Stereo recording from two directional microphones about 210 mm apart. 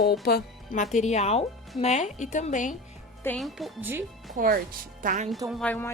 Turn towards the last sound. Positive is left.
turn(degrees=5)  # may be behind; listen again after turning